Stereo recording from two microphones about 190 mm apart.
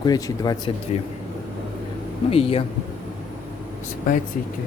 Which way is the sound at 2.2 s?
30° left (ahead or behind).